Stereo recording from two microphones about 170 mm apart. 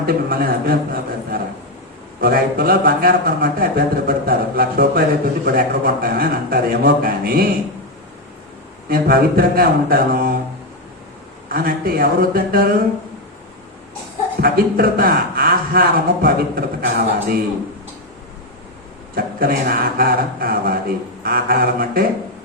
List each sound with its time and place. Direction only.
0.0 s speech: 60° right (ahead or behind)
2.2 s speech: 60° right (ahead or behind)
8.9 s speech: 60° right (ahead or behind)
11.4 s speech: 60° right (ahead or behind)
14.4 s speech: 60° right (ahead or behind)
19.1 s speech: 60° right (ahead or behind)